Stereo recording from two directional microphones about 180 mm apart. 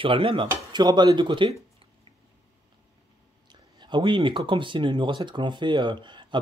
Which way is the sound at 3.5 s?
25° right (ahead or behind).